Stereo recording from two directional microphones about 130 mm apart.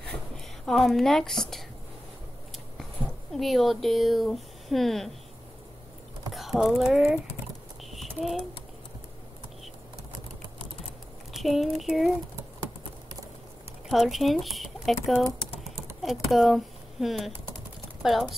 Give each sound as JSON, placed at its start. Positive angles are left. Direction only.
{"t": 0.0, "sound": "a sound", "side_deg": 5}
{"t": 3.3, "sound": "speech", "side_deg": 0}
{"t": 6.3, "sound": "speech", "side_deg": 0}
{"t": 7.9, "sound": "a sound", "side_deg": 0}
{"t": 11.3, "sound": "speech", "side_deg": 0}
{"t": 13.8, "sound": "speech", "side_deg": 0}
{"t": 16.0, "sound": "speech", "side_deg": 0}